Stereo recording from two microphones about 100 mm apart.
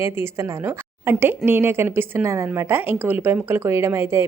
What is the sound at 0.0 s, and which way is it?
A woman's voice, 25° right (ahead or behind).